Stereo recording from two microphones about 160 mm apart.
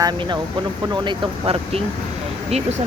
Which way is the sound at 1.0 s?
35° right (ahead or behind).